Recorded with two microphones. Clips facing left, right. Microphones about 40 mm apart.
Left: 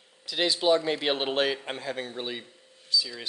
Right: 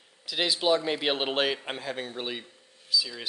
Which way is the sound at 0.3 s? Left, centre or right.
Centre.